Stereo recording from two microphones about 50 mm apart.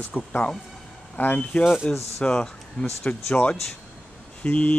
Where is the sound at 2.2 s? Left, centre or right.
Left.